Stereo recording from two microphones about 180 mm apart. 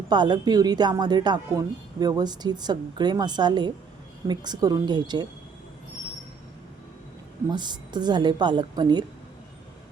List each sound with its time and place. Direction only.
0.1 s a woman's voice: 25° right (ahead or behind)
7.5 s a woman's voice: 25° right (ahead or behind)